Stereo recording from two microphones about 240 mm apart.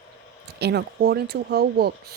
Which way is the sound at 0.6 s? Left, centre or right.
Right.